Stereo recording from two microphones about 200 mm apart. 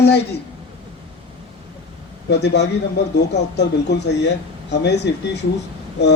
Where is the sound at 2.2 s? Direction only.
60° left (ahead or behind).